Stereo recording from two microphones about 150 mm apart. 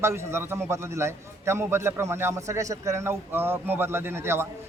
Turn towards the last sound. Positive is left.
turn(degrees=-15)  # may be behind; listen again after turning